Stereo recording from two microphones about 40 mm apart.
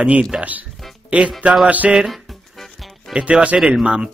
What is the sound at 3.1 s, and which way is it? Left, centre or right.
Speech, right.